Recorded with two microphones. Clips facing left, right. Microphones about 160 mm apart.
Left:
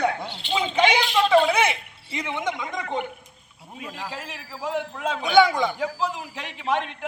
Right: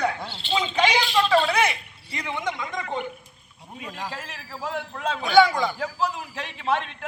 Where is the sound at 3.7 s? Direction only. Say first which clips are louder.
Even; 5° left (ahead or behind).